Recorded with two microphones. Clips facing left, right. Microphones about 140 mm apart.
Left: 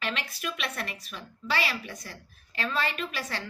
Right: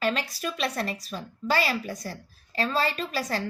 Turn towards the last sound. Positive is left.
turn(degrees=-35)  # may be behind; listen again after turning